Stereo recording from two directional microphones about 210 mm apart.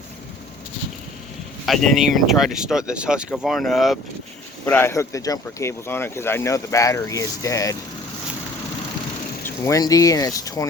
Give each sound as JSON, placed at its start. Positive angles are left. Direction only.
{"t": 1.6, "sound": "speech", "side_deg": 0}
{"t": 9.6, "sound": "speech", "side_deg": 15}